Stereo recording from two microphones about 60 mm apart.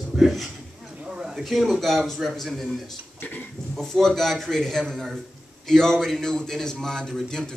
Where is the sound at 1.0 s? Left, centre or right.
Centre.